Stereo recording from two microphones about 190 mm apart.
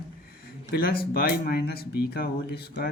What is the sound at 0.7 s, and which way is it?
Speech, 55° left (ahead or behind).